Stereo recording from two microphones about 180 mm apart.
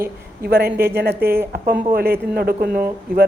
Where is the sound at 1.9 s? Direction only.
60° right (ahead or behind).